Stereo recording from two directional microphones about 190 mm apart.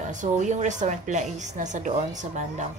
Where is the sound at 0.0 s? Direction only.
40° right (ahead or behind).